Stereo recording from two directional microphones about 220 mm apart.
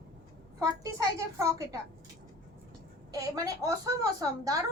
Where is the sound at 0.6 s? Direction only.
15° right (ahead or behind).